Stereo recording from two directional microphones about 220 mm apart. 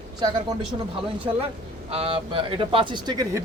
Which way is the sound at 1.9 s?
25° right (ahead or behind).